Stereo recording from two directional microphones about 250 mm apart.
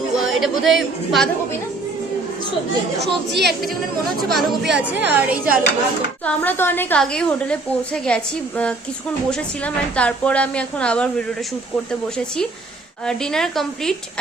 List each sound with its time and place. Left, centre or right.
0.3 s a woman's voice: centre
3.0 s speech: right
4.3 s a woman's voice: centre
6.2 s a woman's voice: centre
13.1 s a woman's voice: centre